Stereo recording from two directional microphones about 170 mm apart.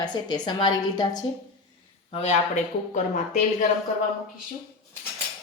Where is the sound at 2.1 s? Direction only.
40° left (ahead or behind).